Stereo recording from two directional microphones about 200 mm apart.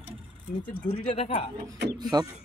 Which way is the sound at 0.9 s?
30° left (ahead or behind).